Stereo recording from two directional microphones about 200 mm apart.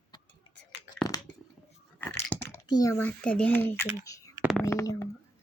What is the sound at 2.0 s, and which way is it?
Speech, 10° left (ahead or behind).